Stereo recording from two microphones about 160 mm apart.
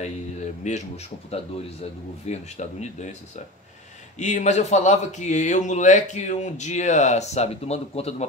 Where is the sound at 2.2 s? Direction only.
45° left (ahead or behind).